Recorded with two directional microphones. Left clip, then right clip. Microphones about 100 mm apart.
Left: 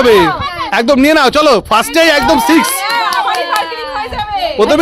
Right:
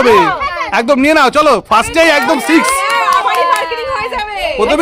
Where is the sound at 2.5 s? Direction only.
35° right (ahead or behind).